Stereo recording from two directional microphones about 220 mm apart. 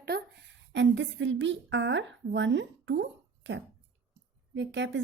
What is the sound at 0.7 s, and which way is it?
A woman's voice, 55° right (ahead or behind).